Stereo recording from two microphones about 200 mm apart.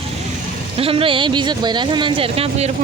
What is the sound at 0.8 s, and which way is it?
Speech, 30° right (ahead or behind).